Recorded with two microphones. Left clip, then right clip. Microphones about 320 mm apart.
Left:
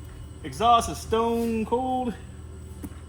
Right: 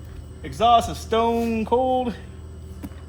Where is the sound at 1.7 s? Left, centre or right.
Right.